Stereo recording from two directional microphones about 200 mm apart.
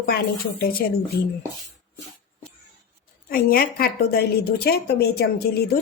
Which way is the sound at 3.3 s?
50° left (ahead or behind).